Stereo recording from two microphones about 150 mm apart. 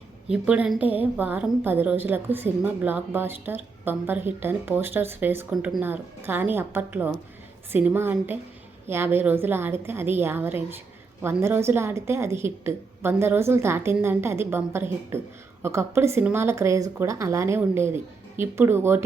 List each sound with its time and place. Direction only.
0.3 s a woman's voice: 5° right (ahead or behind)